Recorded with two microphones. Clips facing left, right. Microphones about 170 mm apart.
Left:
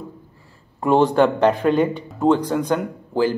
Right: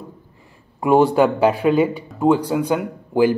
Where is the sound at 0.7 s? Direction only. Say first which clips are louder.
Right 1 dB; 10° right (ahead or behind).